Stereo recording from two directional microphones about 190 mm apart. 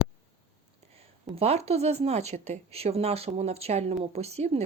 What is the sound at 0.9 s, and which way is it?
A woman's voice, 30° right (ahead or behind).